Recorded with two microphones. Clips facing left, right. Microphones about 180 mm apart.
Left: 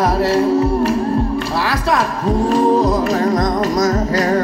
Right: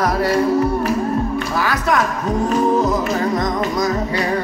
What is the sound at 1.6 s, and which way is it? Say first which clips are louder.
Music: even; 30° left (ahead or behind).